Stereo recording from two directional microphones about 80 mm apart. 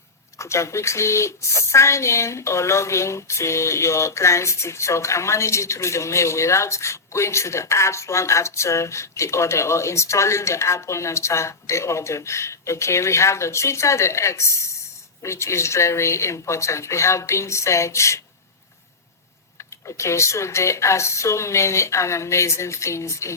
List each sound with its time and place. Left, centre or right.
0.3 s speech: left
19.5 s speech: left